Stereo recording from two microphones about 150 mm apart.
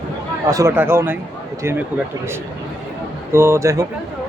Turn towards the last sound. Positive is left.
turn(degrees=-20)  # may be behind; listen again after turning